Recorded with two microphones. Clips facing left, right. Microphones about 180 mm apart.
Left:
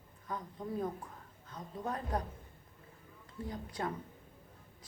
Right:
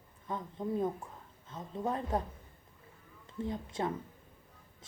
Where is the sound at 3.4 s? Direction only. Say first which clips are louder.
Right 4 dB; 25° right (ahead or behind).